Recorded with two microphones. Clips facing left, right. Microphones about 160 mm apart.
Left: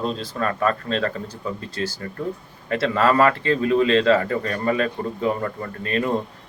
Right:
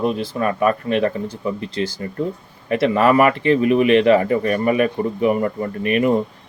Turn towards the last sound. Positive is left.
turn(degrees=-15)  # may be behind; listen again after turning